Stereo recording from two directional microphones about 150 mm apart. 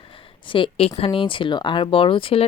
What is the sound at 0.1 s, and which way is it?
Speech, 35° left (ahead or behind).